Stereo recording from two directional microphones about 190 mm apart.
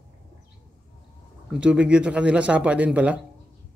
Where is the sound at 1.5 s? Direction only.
5° right (ahead or behind).